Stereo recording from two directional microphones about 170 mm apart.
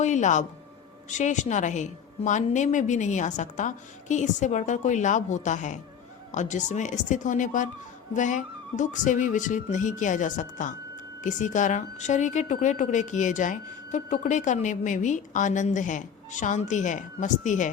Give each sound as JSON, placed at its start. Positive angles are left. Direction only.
{"t": 0.0, "sound": "speech", "side_deg": 45}